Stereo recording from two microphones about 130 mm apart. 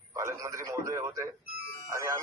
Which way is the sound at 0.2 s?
25° right (ahead or behind).